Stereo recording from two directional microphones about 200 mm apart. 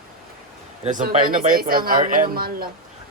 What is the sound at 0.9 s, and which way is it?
Speech, 40° right (ahead or behind).